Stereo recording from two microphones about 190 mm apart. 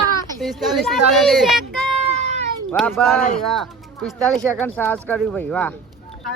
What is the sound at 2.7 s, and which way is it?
Speech, 5° left (ahead or behind).